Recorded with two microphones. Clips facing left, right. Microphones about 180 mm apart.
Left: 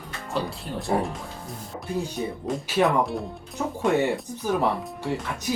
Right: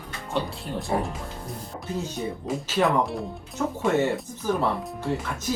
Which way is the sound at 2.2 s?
Centre (ahead or behind).